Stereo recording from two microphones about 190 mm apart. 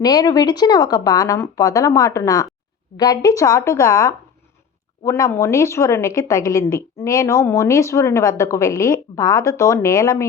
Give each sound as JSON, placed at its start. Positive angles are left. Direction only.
{"t": 0.0, "sound": "a woman's voice", "side_deg": 20}